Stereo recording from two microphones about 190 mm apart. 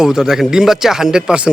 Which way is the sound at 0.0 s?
Centre (ahead or behind).